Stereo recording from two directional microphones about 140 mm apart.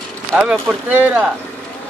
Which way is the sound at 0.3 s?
5° right (ahead or behind).